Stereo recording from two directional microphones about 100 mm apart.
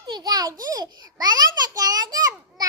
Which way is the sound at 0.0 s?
45° right (ahead or behind).